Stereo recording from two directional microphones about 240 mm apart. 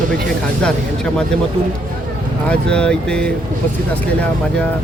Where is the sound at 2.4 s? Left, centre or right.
Centre.